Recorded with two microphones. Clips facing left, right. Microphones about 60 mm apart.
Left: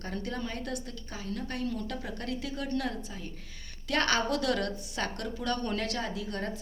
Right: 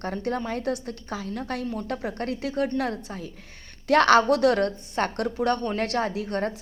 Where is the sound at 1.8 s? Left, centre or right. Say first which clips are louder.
Right 7 dB; right.